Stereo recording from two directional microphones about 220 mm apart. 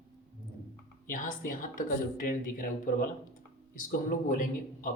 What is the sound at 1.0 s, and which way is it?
A woman's voice, 40° left (ahead or behind).